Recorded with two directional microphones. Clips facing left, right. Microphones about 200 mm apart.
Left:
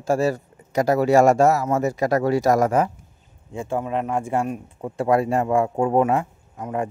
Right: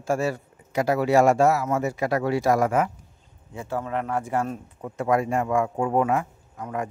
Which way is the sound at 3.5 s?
25° left (ahead or behind).